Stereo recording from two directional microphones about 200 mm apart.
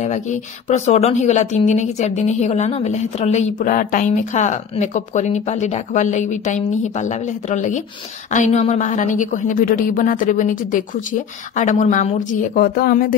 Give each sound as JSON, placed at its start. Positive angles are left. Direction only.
{"t": 0.0, "sound": "speech", "side_deg": 35}